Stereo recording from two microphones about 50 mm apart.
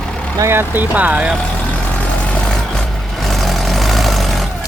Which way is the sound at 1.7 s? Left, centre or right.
Left.